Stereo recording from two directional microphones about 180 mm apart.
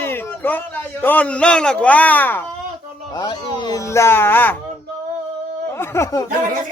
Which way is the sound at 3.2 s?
25° left (ahead or behind).